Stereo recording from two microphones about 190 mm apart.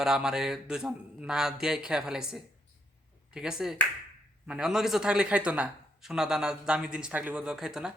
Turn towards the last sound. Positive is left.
turn(degrees=-5)  # may be behind; listen again after turning